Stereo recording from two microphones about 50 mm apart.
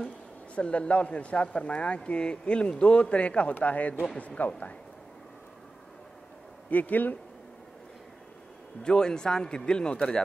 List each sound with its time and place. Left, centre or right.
0.6 s a man's voice: left
6.7 s speech: left
8.8 s a man's voice: centre